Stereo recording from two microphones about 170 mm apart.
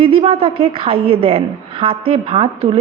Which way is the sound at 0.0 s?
35° right (ahead or behind).